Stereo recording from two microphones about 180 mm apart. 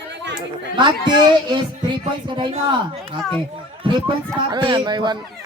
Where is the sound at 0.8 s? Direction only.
25° right (ahead or behind).